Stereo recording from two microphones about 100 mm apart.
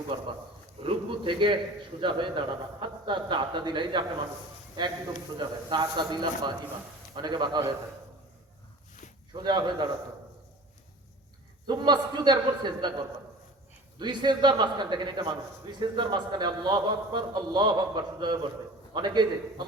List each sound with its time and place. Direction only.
0.1 s a man's voice: 65° right (ahead or behind)
5.4 s a man's voice: 50° right (ahead or behind)
9.3 s a man's voice: 45° right (ahead or behind)
11.6 s a man's voice: 45° right (ahead or behind)